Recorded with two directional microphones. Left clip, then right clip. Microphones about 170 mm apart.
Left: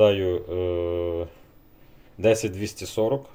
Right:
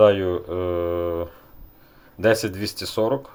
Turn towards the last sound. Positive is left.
turn(degrees=5)  # may be behind; listen again after turning